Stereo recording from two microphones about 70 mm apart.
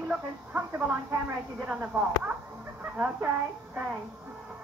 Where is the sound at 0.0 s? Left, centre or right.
Centre.